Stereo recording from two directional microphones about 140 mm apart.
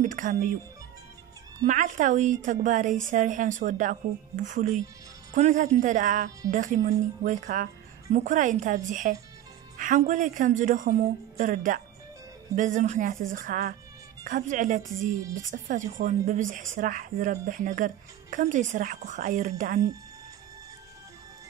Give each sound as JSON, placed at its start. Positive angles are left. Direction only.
{"t": 0.0, "sound": "speech", "side_deg": -60}
{"t": 1.6, "sound": "a woman's voice", "side_deg": -65}
{"t": 14.2, "sound": "a woman's voice", "side_deg": -70}